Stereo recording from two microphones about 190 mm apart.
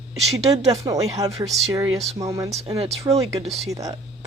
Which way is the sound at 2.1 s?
15° right (ahead or behind).